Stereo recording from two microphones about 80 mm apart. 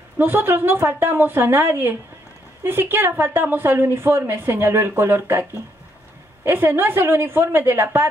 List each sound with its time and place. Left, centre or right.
0.2 s a woman's voice: right